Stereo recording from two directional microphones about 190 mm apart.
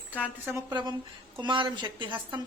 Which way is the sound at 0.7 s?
25° right (ahead or behind).